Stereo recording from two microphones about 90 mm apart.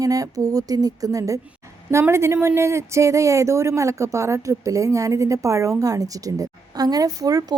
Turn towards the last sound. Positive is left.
turn(degrees=-40)  # may be behind; listen again after turning